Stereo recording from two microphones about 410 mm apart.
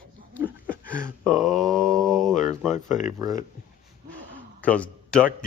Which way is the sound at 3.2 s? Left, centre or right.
Centre.